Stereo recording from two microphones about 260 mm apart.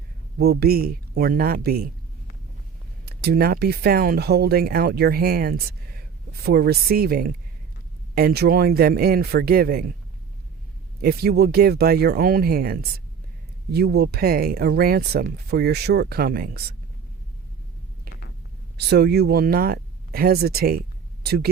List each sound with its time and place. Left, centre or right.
0.3 s speech: right
3.1 s speech: right
11.0 s speech: right
18.8 s speech: right